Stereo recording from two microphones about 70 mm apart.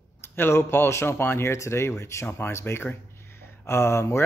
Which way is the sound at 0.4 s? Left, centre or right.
Left.